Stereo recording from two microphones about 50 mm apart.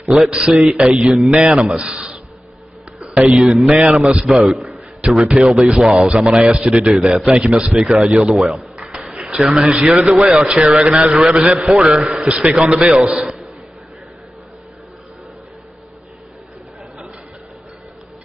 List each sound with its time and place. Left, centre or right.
0.0 s a man's voice: centre
3.3 s a man's voice: centre
6.9 s a man's voice: centre
7.5 s a man's voice: centre
9.0 s a sound: centre
9.7 s a man's voice: centre
9.9 s a man's voice: centre
12.3 s a man's voice: centre
12.5 s a man's voice: centre